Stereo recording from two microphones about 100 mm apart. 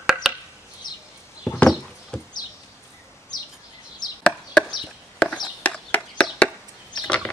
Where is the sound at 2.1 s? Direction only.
10° left (ahead or behind).